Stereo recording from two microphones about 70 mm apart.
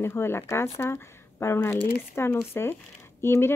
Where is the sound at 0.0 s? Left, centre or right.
Left.